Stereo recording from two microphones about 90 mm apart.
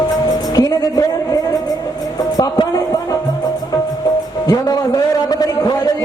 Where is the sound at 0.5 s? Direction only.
45° left (ahead or behind).